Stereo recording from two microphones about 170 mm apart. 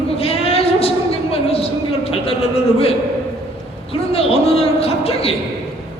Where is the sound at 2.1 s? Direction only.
35° left (ahead or behind).